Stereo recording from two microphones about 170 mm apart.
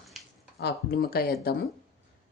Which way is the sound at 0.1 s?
Centre (ahead or behind).